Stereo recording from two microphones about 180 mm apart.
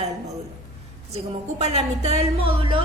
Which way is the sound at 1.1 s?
35° right (ahead or behind).